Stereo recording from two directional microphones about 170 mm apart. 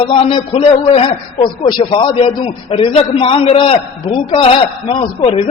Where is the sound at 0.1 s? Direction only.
35° left (ahead or behind).